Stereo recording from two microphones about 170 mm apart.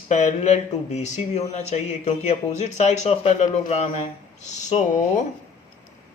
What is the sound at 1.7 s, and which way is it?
Speech, 40° left (ahead or behind).